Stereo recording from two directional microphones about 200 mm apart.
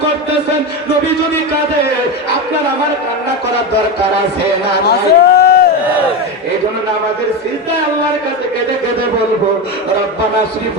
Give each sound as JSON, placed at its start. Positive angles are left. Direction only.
{"t": 4.9, "sound": "a man's voice", "side_deg": 55}